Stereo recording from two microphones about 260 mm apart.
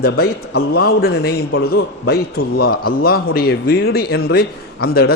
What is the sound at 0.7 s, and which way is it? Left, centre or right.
A man's voice, left.